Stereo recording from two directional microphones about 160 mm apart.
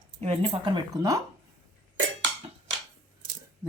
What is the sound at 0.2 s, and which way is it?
Speech, 35° right (ahead or behind).